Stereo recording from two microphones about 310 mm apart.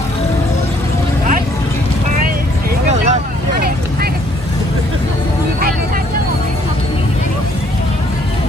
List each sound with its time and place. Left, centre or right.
2.9 s vehicle: right